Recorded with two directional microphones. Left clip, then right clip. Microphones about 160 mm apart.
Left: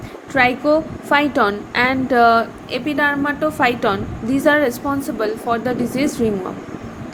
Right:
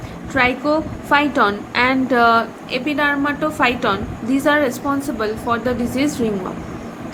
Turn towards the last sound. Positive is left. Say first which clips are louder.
# even
turn(degrees=40)  # may be behind; listen again after turning